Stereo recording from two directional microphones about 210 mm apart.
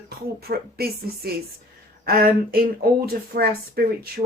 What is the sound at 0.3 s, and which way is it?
Speech, 45° right (ahead or behind).